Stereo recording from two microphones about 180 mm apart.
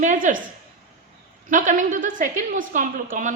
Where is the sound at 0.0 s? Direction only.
45° right (ahead or behind).